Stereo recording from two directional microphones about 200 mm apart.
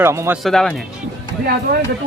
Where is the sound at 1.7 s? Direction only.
55° right (ahead or behind).